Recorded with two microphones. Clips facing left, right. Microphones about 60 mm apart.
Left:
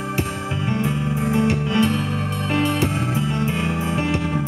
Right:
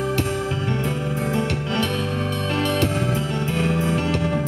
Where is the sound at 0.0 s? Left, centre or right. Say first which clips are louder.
Right 2 dB; centre.